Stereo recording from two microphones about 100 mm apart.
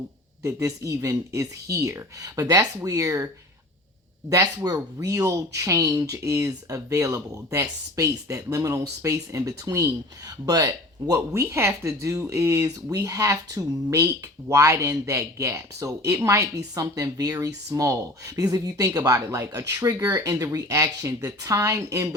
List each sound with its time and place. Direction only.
0.4 s speech: 30° right (ahead or behind)
4.3 s speech: 40° right (ahead or behind)